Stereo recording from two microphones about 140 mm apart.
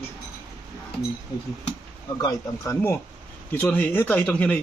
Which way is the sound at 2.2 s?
25° left (ahead or behind).